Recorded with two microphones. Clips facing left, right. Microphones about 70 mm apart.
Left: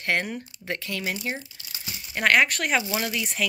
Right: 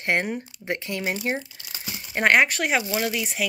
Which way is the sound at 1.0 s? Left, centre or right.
Right.